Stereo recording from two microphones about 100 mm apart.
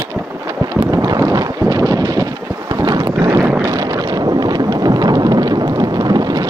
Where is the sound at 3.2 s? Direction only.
30° right (ahead or behind).